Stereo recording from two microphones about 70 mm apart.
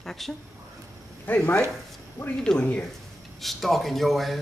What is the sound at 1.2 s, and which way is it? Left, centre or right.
Speech, left.